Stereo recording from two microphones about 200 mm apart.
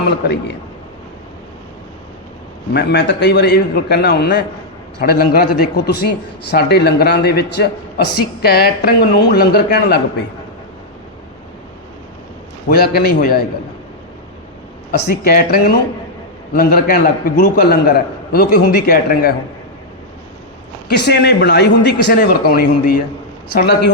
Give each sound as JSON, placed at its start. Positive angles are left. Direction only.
{"t": 2.7, "sound": "a man's voice", "side_deg": 60}
{"t": 12.6, "sound": "a man's voice", "side_deg": 50}
{"t": 14.9, "sound": "a man's voice", "side_deg": 50}
{"t": 20.9, "sound": "a man's voice", "side_deg": 55}